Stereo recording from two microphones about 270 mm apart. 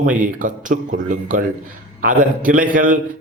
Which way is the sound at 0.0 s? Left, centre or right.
Right.